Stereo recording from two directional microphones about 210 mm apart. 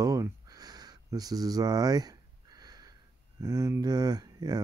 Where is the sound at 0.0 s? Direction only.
15° right (ahead or behind).